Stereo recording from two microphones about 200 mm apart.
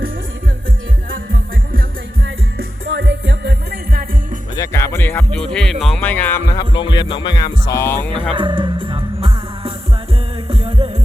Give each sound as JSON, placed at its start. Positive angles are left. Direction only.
{"t": 2.2, "sound": "music", "side_deg": -70}
{"t": 4.5, "sound": "speech", "side_deg": 15}
{"t": 5.8, "sound": "music", "side_deg": 5}
{"t": 8.3, "sound": "music", "side_deg": -25}